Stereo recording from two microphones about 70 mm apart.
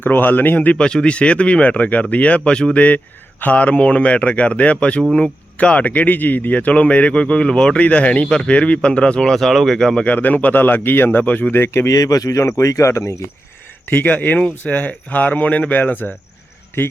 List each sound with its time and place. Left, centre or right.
0.0 s speech: left
11.9 s speech: left
13.8 s speech: left